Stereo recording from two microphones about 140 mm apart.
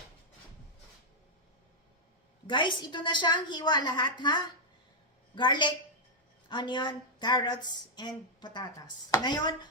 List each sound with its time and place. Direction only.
2.5 s a woman's voice: 35° left (ahead or behind)